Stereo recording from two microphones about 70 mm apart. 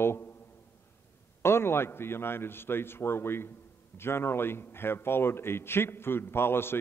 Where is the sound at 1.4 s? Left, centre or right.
Left.